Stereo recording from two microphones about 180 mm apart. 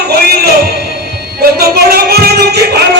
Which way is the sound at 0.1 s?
60° right (ahead or behind).